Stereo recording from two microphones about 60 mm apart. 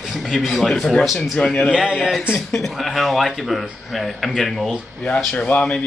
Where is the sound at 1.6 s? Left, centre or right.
Centre.